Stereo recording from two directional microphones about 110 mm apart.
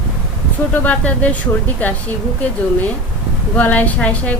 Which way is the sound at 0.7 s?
15° left (ahead or behind).